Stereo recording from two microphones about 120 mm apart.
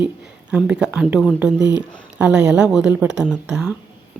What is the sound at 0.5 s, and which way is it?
Speech, 10° right (ahead or behind).